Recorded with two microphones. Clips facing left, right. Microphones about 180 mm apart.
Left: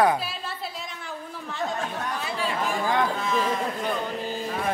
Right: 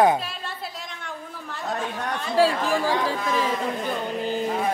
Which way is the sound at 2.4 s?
90° right.